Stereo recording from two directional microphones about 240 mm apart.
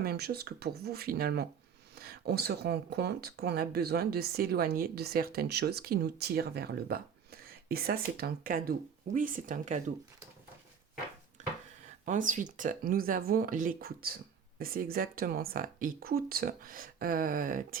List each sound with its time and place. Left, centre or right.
0.0 s speech: right
12.0 s speech: right